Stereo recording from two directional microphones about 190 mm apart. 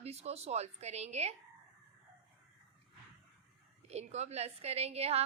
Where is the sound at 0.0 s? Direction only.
35° right (ahead or behind).